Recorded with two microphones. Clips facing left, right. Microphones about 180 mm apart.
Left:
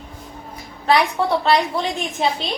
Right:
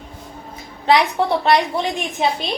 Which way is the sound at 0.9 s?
15° right (ahead or behind).